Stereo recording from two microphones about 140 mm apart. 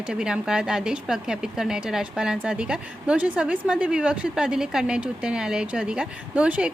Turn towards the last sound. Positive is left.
turn(degrees=-10)  # may be behind; listen again after turning